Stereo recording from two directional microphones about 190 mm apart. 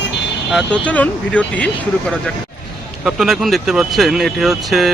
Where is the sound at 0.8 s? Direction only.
5° left (ahead or behind).